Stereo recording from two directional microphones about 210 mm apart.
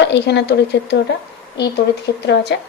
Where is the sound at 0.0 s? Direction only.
55° left (ahead or behind).